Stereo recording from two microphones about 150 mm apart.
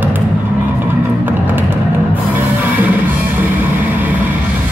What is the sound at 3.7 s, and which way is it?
Vehicle, 10° right (ahead or behind).